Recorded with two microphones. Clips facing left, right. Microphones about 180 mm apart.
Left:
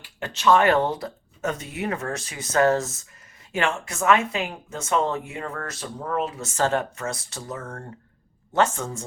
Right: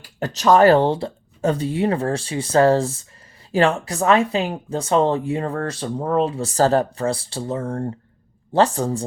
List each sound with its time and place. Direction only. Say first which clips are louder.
0.0 s speech: right 3 dB; 40° right (ahead or behind)